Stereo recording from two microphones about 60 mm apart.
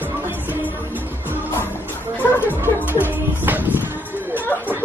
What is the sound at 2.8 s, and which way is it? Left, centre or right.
Music, right.